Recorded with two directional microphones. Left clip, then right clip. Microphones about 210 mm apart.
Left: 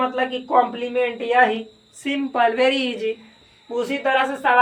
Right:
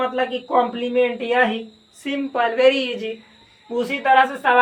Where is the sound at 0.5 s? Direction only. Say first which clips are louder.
Even; 20° left (ahead or behind).